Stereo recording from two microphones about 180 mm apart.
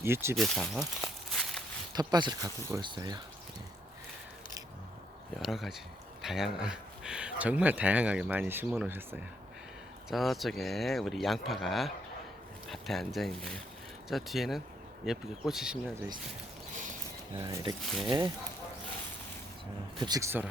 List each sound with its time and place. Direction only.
0.0 s speech: 15° right (ahead or behind)
0.3 s speech: centre (ahead or behind)
1.3 s walk: centre (ahead or behind)
1.9 s speech: 20° right (ahead or behind)
5.4 s speech: centre (ahead or behind)
10.1 s speech: centre (ahead or behind)
16.7 s a sound: 45° right (ahead or behind)
17.3 s speech: 25° right (ahead or behind)
20.0 s speech: 20° right (ahead or behind)